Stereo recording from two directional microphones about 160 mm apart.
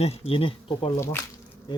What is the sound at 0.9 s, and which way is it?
Speech, 15° left (ahead or behind).